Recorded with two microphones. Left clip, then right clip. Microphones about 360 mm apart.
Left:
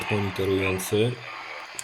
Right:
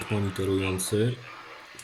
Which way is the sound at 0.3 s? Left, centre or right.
Centre.